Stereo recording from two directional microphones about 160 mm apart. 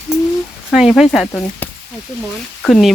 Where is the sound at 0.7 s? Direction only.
Centre (ahead or behind).